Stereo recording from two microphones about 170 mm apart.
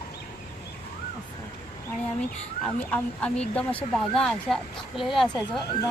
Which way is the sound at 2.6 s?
5° left (ahead or behind).